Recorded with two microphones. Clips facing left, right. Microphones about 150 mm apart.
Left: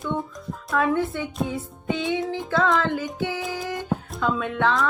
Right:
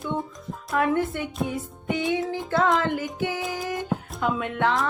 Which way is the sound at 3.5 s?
20° right (ahead or behind).